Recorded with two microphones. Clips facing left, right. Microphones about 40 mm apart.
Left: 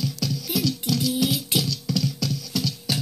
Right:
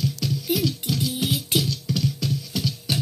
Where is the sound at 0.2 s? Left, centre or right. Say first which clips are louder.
Right 1 dB; centre.